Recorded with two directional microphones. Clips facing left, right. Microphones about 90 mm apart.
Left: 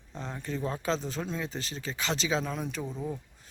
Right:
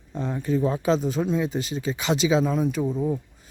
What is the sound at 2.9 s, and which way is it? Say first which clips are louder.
Speech: right 10 dB; 35° right (ahead or behind).